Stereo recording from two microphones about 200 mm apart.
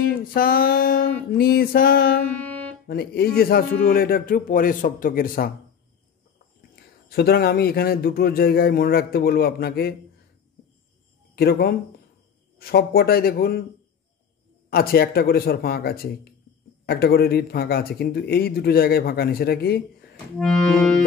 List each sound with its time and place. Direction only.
0.2 s speech: 45° left (ahead or behind)
2.3 s music: 10° left (ahead or behind)
2.9 s speech: 50° left (ahead or behind)
6.7 s speech: 50° left (ahead or behind)
11.3 s speech: 50° left (ahead or behind)
14.7 s speech: 50° left (ahead or behind)
20.3 s accordion: 5° left (ahead or behind)